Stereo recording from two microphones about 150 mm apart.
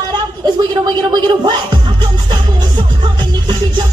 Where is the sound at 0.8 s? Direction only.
30° right (ahead or behind).